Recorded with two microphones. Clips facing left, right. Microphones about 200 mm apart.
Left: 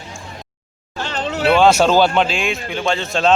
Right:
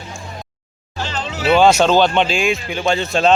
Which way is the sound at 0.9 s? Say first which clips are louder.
Left 2 dB; 55° left (ahead or behind).